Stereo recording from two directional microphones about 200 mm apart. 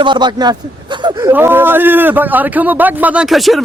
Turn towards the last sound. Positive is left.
turn(degrees=0)  # may be behind; listen again after turning